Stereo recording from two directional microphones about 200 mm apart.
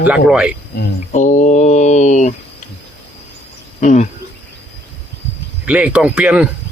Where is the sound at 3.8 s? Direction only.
35° left (ahead or behind).